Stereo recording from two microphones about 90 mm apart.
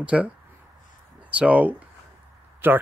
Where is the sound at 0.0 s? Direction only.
15° right (ahead or behind).